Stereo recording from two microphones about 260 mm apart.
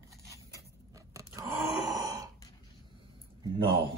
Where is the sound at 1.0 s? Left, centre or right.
Centre.